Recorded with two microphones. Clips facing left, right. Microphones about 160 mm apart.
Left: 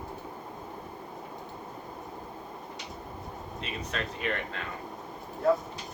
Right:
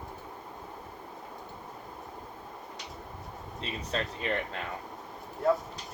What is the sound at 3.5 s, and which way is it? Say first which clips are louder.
Speech: right 2 dB; 30° right (ahead or behind).